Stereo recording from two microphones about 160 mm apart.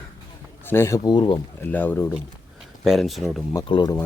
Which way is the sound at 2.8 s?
Centre (ahead or behind).